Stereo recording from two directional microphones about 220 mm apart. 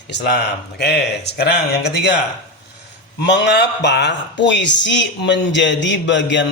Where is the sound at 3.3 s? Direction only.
50° left (ahead or behind).